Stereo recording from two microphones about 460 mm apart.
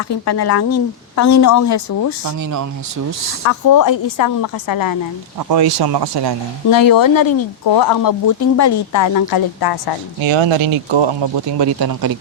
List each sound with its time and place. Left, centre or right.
0.4 s a woman's voice: left
2.2 s speech: right
3.4 s a woman's voice: left
5.5 s speech: right
6.7 s speech: left
10.2 s speech: right